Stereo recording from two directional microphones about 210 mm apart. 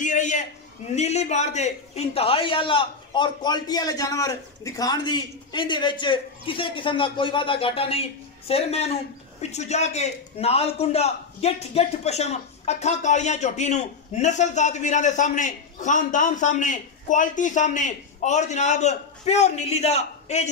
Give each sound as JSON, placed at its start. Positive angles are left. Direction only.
{"t": 0.0, "sound": "a man's voice", "side_deg": 35}